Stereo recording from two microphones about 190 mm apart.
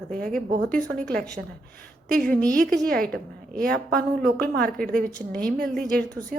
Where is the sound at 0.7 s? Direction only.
5° left (ahead or behind).